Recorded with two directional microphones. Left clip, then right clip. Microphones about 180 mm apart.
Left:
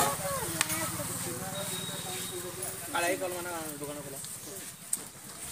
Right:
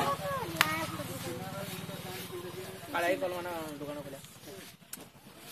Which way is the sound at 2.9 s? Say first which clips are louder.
Even; 60° right (ahead or behind).